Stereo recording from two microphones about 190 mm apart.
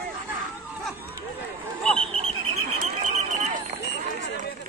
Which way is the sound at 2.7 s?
40° right (ahead or behind).